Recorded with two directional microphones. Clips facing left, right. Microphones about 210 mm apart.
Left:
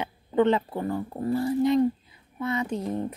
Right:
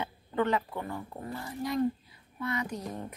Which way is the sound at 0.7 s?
35° left (ahead or behind).